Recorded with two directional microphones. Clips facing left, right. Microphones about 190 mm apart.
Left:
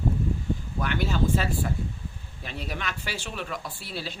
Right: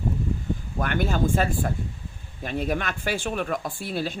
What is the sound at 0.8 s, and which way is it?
Speech, 50° right (ahead or behind).